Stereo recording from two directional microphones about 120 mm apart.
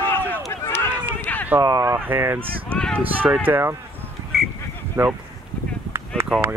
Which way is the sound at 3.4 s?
15° right (ahead or behind).